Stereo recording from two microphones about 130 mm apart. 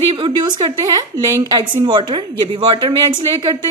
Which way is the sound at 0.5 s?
30° right (ahead or behind).